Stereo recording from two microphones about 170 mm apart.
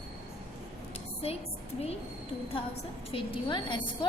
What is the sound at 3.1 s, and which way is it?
A woman's voice, 30° left (ahead or behind).